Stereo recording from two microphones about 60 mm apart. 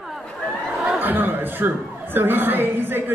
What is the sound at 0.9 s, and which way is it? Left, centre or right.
Chuckle, right.